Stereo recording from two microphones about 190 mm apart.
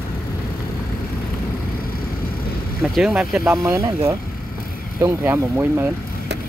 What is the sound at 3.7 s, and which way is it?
Speech, 15° right (ahead or behind).